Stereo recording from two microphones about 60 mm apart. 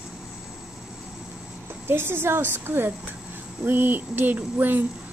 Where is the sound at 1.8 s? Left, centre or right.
Right.